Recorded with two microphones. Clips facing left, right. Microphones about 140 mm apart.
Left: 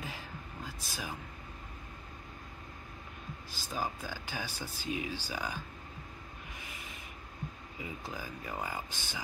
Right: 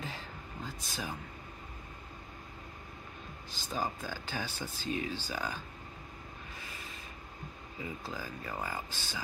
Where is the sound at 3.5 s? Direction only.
10° left (ahead or behind).